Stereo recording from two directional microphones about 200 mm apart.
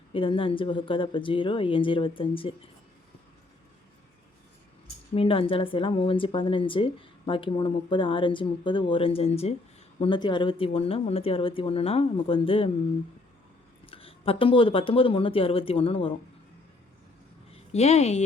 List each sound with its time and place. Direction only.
0.1 s speech: 25° left (ahead or behind)
5.1 s speech: 25° left (ahead or behind)
13.8 s speech: 30° left (ahead or behind)
17.5 s a woman's voice: 30° left (ahead or behind)